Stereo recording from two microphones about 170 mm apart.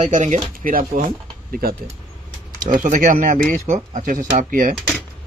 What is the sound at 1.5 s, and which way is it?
Speech, 65° right (ahead or behind).